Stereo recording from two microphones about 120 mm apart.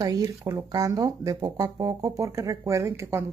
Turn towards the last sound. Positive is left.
turn(degrees=-25)  # may be behind; listen again after turning